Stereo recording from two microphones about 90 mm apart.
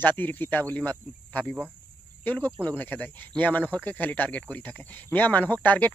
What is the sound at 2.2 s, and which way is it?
Speech, 20° left (ahead or behind).